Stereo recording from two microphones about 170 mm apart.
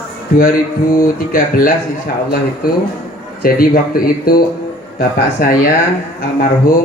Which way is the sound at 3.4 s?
60° left (ahead or behind).